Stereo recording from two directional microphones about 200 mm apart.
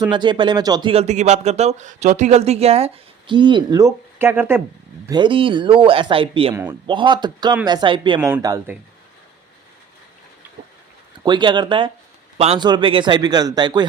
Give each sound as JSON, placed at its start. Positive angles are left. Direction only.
{"t": 0.0, "sound": "speech", "side_deg": -20}
{"t": 5.0, "sound": "speech", "side_deg": -20}
{"t": 11.2, "sound": "speech", "side_deg": -20}